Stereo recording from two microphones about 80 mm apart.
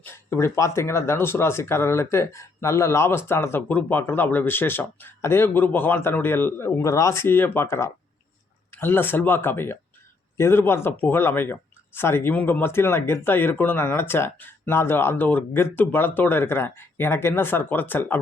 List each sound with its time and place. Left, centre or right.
0.0 s speech: left
3.7 s speech: left